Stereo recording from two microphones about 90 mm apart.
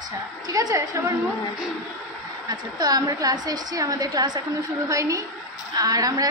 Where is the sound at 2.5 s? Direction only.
50° right (ahead or behind).